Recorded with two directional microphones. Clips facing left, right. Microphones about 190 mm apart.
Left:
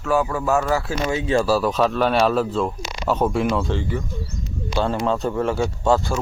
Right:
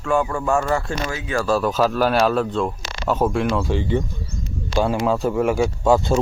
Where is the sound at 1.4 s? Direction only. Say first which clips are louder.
Even; centre (ahead or behind).